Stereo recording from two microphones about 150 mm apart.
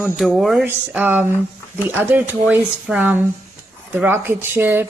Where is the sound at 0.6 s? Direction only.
10° right (ahead or behind).